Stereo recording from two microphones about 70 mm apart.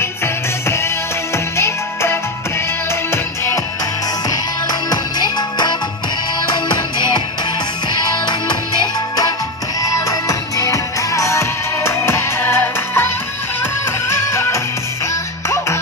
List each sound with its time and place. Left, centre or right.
0.0 s music: left
4.8 s music: left
9.8 s music: left